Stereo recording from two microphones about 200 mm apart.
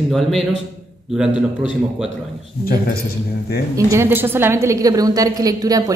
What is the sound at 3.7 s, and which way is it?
A woman's voice, 15° right (ahead or behind).